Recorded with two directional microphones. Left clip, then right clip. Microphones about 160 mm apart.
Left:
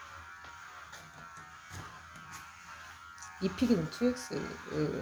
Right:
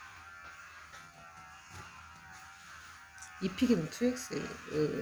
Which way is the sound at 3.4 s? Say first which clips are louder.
Even; 25° right (ahead or behind).